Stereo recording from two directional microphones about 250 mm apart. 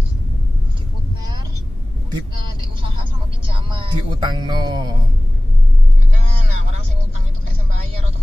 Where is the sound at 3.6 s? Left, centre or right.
Centre.